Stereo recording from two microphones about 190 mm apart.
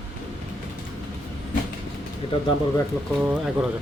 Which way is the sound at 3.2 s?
10° right (ahead or behind).